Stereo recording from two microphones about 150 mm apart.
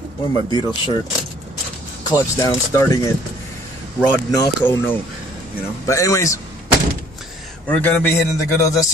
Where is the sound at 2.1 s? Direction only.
25° left (ahead or behind).